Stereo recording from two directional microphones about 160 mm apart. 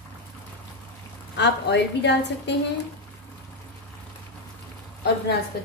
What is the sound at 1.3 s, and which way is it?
A woman's voice, 90° left.